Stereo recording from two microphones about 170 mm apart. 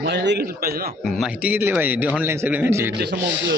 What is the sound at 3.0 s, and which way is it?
Speech, 75° right (ahead or behind).